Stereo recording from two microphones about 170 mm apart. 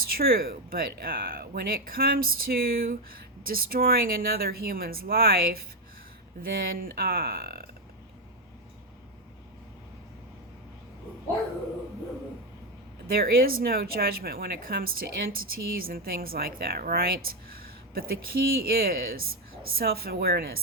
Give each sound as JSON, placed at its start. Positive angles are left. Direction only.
{"t": 0.2, "sound": "a woman's voice", "side_deg": -60}
{"t": 13.1, "sound": "a woman's voice", "side_deg": -60}